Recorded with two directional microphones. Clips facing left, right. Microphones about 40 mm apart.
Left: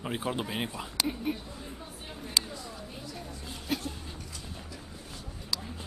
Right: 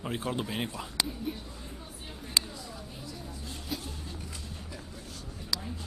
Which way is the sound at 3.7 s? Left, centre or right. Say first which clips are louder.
Left 5 dB; left.